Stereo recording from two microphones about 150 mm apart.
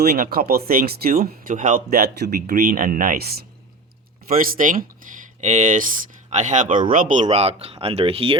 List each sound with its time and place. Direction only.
0.0 s speech: 85° right
4.3 s speech: 70° right (ahead or behind); by 8.4 s 40° right (ahead or behind)